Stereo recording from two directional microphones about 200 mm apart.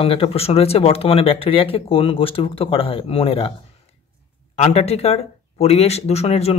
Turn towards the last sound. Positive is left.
turn(degrees=30)  # may be behind; listen again after turning